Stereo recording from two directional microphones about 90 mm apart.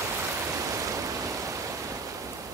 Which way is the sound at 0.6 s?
40° right (ahead or behind).